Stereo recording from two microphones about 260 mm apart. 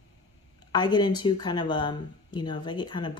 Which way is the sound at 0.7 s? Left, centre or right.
Centre.